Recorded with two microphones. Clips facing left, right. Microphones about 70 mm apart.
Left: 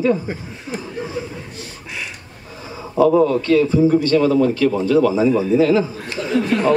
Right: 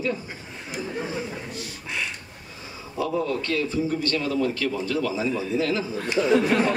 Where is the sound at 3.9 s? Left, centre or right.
Left.